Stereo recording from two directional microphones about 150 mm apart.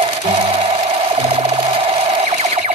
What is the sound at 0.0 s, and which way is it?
Sewing machine, 40° right (ahead or behind).